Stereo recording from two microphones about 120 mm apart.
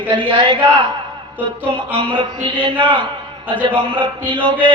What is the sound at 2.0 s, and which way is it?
Speech, 45° right (ahead or behind).